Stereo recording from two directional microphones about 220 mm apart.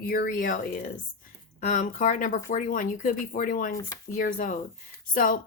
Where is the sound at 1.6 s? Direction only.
35° left (ahead or behind).